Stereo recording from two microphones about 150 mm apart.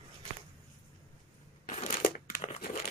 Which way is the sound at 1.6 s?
55° left (ahead or behind).